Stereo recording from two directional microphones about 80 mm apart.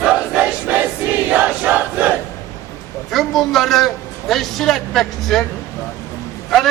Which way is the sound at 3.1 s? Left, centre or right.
Centre.